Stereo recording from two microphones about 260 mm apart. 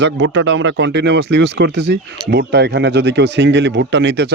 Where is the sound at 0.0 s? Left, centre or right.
Right.